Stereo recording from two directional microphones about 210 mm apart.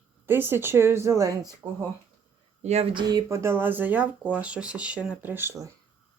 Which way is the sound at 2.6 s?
30° right (ahead or behind).